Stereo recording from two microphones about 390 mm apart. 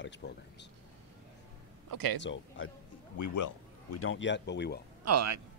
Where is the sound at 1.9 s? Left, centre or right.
Right.